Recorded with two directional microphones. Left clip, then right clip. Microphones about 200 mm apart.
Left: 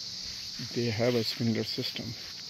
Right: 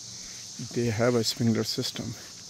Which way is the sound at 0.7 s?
15° right (ahead or behind).